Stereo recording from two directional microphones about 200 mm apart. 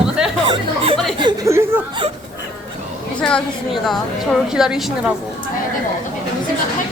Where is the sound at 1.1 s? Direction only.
20° right (ahead or behind).